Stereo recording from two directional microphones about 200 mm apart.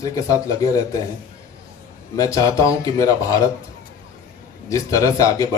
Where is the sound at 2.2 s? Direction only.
15° left (ahead or behind).